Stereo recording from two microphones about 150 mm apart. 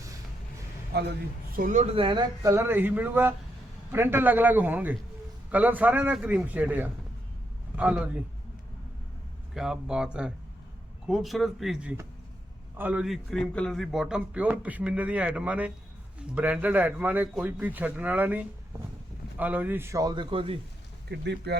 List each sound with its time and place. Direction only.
1.5 s speech: 70° right (ahead or behind)
1.8 s speech: 35° right (ahead or behind)
2.4 s a man's voice: 20° right (ahead or behind)
9.6 s a man's voice: 5° right (ahead or behind); by 20.2 s 25° right (ahead or behind)
20.3 s speech: 40° right (ahead or behind)
21.1 s speech: 90° right